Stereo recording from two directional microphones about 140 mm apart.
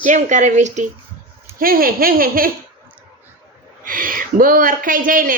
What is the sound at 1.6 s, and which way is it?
Speech, 90° right.